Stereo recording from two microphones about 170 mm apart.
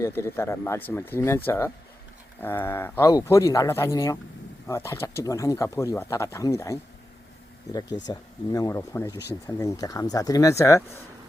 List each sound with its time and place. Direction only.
0.0 s speech: 15° left (ahead or behind)